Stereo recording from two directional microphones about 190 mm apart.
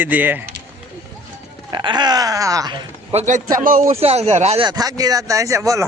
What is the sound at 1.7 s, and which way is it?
Speech, 25° right (ahead or behind).